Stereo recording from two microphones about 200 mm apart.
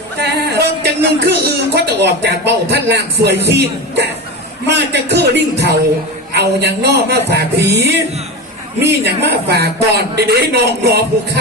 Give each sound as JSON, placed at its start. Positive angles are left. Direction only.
{"t": 0.2, "sound": "music", "side_deg": -55}
{"t": 8.9, "sound": "a man's voice", "side_deg": -55}